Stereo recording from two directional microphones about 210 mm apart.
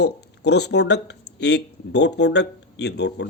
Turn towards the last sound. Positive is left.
turn(degrees=55)  # may be behind; listen again after turning